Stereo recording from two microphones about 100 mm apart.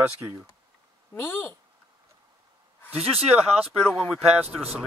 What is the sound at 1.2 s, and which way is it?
Speech, 20° left (ahead or behind).